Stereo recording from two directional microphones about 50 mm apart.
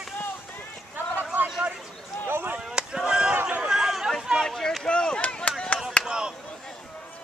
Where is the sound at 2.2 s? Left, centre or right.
Right.